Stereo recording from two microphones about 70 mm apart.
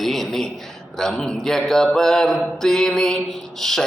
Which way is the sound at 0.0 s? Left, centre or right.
Centre.